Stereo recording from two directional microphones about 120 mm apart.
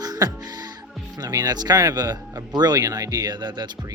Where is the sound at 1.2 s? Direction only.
30° right (ahead or behind).